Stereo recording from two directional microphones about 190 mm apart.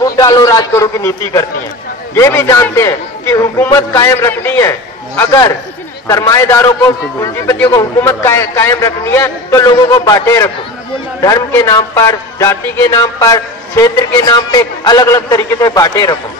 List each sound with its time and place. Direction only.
0.0 s a man's voice: 20° left (ahead or behind)